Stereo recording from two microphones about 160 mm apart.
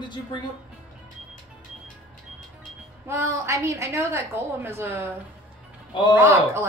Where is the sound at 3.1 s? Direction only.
15° right (ahead or behind).